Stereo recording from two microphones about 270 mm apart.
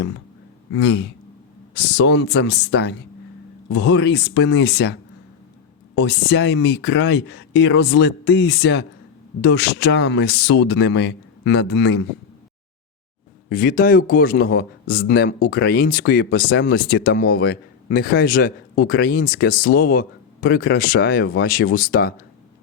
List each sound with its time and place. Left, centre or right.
0.8 s speech: left
6.0 s speech: left
13.5 s speech: left